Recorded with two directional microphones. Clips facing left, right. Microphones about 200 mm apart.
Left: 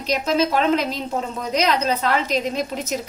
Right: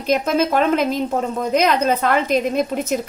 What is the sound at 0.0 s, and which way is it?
A woman's voice, 50° right (ahead or behind).